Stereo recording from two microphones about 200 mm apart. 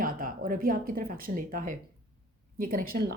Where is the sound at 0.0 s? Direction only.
45° right (ahead or behind).